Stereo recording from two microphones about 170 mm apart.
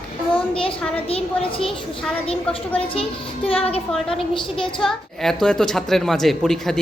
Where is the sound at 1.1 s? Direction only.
35° left (ahead or behind).